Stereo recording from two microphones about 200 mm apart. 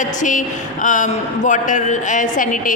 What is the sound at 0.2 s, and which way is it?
A woman's voice, 40° left (ahead or behind).